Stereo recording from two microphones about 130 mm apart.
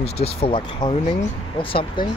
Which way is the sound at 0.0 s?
50° left (ahead or behind).